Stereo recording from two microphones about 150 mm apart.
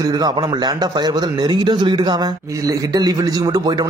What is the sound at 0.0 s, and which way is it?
A man's voice, 25° right (ahead or behind).